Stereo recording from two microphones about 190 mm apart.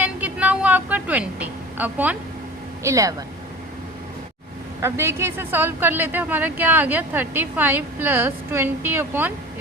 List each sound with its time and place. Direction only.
0.0 s a sound: 10° right (ahead or behind)
2.8 s a woman's voice: 15° right (ahead or behind)
4.8 s a woman's voice: 15° right (ahead or behind)